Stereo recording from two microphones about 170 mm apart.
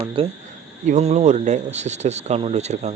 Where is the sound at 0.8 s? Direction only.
40° right (ahead or behind).